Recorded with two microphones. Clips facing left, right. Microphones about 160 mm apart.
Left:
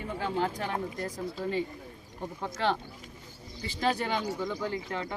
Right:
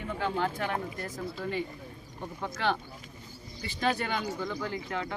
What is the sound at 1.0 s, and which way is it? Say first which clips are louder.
Speech: left 2 dB; 30° left (ahead or behind).